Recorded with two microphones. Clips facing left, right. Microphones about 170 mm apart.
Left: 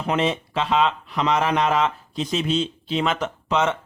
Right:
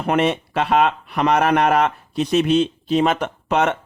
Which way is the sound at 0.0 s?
60° right (ahead or behind).